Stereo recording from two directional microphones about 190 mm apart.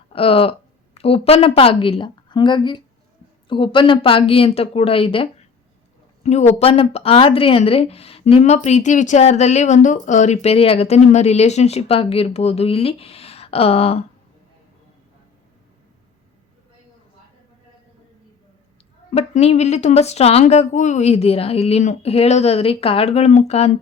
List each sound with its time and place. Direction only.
0.1 s a woman's voice: 30° left (ahead or behind)
19.1 s speech: 35° left (ahead or behind)